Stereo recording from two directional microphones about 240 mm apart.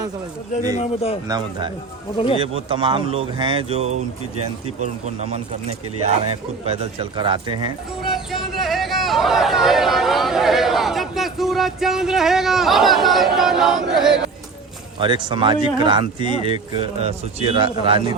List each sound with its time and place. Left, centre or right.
0.8 s speech: left
1.3 s speech: centre
2.1 s speech: left
2.4 s speech: right
8.0 s speech: centre
14.9 s speech: centre